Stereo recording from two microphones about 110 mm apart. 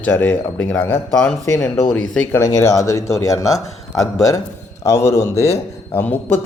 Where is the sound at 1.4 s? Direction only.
25° left (ahead or behind).